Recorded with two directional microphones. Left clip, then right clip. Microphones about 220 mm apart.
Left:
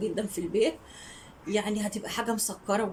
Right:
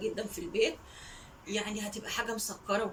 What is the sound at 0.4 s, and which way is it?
Speech, 30° left (ahead or behind).